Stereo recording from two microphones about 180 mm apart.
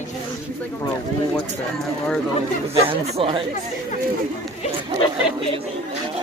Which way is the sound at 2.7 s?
30° right (ahead or behind).